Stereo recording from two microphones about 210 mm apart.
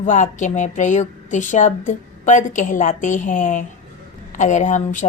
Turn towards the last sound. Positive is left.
turn(degrees=35)  # may be behind; listen again after turning